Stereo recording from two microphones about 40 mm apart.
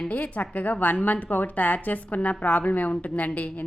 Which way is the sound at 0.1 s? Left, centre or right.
Left.